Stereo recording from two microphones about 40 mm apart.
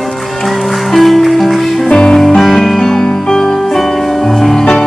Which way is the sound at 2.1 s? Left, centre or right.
Centre.